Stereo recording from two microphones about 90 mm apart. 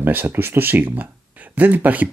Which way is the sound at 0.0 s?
20° right (ahead or behind).